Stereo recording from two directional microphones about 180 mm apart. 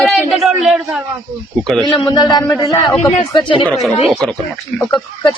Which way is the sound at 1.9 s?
25° left (ahead or behind).